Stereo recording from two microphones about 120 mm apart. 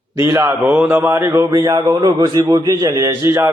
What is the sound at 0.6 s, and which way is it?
Mantra, 15° right (ahead or behind).